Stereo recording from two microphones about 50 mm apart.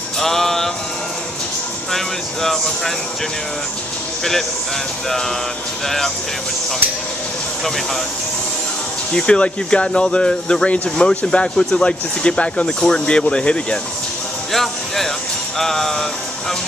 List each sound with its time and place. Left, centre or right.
0.2 s music: centre
1.9 s speech: centre
4.2 s speech: centre
5.9 s speech: centre
7.6 s speech: centre
9.1 s speech: centre
14.5 s speech: centre
15.5 s music: centre